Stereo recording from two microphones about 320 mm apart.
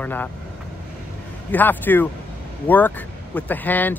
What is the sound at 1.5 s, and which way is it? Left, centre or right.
Speech, centre.